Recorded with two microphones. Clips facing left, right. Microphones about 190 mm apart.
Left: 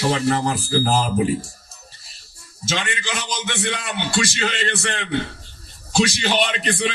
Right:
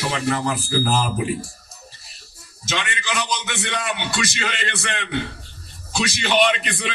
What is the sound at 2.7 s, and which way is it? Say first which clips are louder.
A man's voice: left 1 dB; 30° left (ahead or behind).